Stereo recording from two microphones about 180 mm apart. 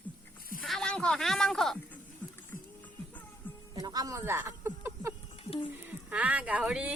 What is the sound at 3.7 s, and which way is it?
Music, 20° right (ahead or behind).